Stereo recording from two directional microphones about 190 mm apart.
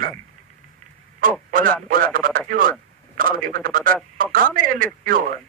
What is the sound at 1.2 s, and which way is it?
Speech, 45° right (ahead or behind).